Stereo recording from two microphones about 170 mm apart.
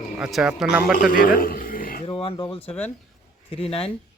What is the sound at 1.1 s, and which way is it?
Speech, 55° left (ahead or behind).